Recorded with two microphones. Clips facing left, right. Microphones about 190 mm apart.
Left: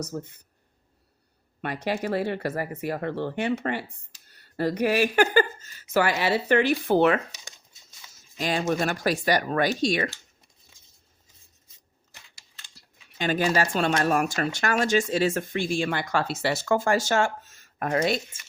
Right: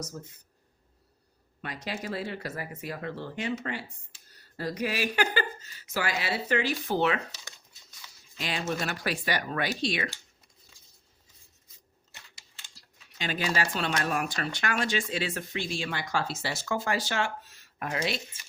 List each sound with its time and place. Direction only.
0.1 s speech: 75° left (ahead or behind)
1.6 s speech: 60° left (ahead or behind)
7.3 s a sound: 20° left (ahead or behind)
8.1 s a sound: 45° left (ahead or behind)
8.8 s speech: 45° left (ahead or behind)
13.1 s speech: 50° left (ahead or behind)